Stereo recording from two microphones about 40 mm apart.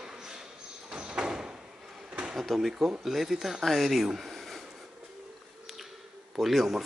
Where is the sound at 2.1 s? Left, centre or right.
Right.